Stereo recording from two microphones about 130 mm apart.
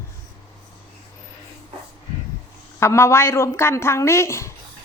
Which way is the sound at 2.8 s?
20° left (ahead or behind).